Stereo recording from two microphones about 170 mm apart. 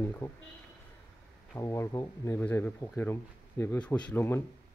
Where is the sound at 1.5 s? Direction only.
15° left (ahead or behind).